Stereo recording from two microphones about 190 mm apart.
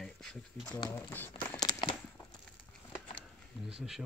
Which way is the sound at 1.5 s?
20° left (ahead or behind).